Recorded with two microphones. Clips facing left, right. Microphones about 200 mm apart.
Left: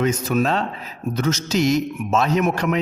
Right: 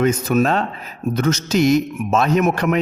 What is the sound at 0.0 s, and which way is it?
A man's voice, 55° right (ahead or behind).